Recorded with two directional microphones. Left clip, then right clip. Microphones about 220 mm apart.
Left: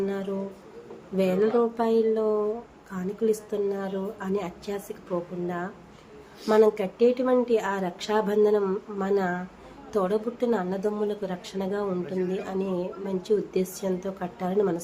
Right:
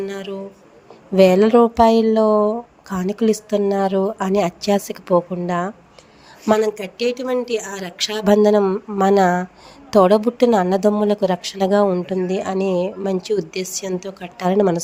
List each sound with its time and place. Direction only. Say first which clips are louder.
0.0 s speech: right 3 dB; 40° right (ahead or behind)
6.8 s speech: right 1 dB; 45° right (ahead or behind)